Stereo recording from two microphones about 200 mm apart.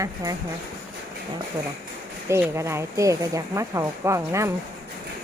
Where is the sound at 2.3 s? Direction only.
15° right (ahead or behind).